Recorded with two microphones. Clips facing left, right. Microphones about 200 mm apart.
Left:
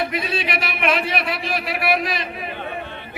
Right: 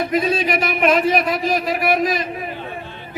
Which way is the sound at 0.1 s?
40° right (ahead or behind).